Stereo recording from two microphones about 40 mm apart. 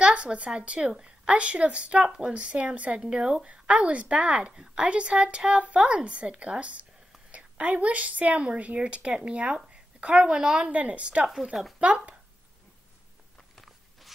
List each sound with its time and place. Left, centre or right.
0.0 s speech: right
3.1 s a woman's voice: right
10.2 s a woman's voice: centre
10.7 s speech: right